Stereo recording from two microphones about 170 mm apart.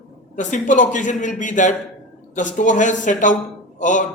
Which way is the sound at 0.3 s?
45° left (ahead or behind).